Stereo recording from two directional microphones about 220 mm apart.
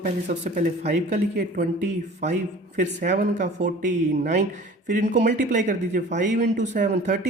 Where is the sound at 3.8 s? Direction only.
35° right (ahead or behind).